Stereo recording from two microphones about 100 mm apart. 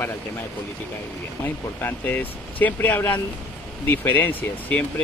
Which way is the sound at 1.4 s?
25° left (ahead or behind).